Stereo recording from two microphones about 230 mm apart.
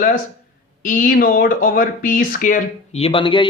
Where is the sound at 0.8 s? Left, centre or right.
Left.